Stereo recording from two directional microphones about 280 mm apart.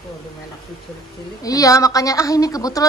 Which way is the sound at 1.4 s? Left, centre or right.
Centre.